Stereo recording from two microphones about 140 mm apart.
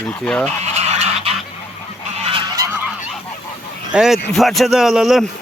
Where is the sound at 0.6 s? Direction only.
50° right (ahead or behind).